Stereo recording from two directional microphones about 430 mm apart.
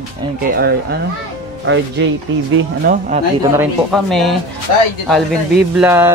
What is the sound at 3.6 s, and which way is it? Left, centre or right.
Speech, centre.